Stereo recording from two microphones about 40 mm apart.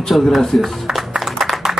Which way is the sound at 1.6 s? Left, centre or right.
Centre.